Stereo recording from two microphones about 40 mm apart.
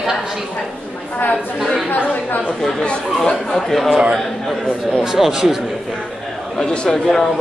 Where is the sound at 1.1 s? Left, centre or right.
Left.